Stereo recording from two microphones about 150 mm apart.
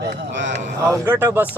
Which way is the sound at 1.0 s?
15° right (ahead or behind).